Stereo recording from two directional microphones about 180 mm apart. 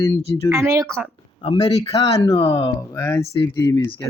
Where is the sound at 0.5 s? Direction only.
15° right (ahead or behind).